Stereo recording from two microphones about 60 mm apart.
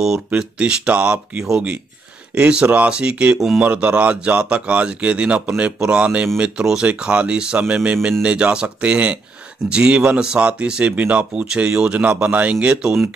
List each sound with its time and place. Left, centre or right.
0.3 s speech: centre